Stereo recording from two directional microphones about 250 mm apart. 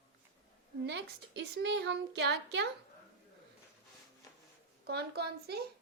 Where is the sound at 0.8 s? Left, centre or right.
Right.